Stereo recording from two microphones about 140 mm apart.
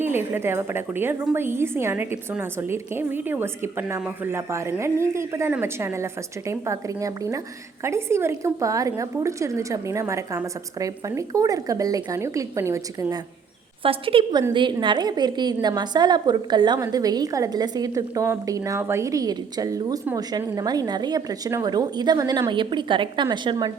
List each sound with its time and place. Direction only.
0.0 s a woman's voice: 15° right (ahead or behind)
13.8 s a woman's voice: 40° right (ahead or behind)